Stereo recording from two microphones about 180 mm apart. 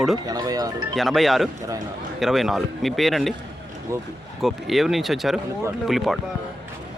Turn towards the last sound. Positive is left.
turn(degrees=0)  # may be behind; listen again after turning